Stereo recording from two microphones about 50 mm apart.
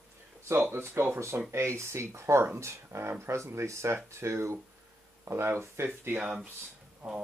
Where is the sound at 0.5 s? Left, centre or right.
Right.